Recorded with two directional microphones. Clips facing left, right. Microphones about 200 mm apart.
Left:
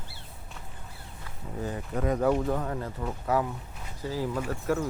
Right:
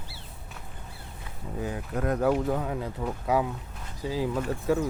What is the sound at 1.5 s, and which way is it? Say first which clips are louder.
Speech: right 1 dB; centre (ahead or behind).